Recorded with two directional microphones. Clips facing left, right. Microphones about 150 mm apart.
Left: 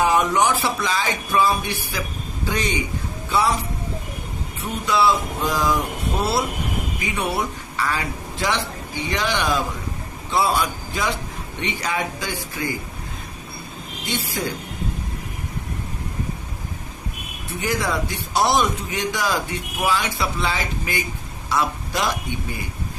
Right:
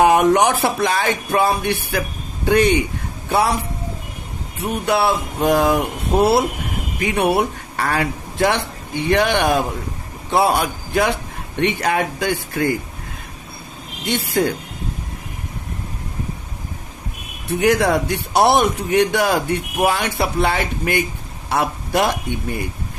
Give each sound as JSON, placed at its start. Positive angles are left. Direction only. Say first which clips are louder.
{"t": 0.0, "sound": "a man's voice", "louder": "right 5 dB", "side_deg": -60}
{"t": 4.9, "sound": "a man's voice", "louder": "even", "side_deg": -60}
{"t": 14.1, "sound": "a man's voice", "louder": "right 8 dB", "side_deg": -60}
{"t": 17.5, "sound": "a man's voice", "louder": "right 8 dB", "side_deg": -65}